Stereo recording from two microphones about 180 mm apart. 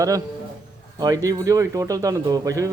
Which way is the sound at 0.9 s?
20° right (ahead or behind).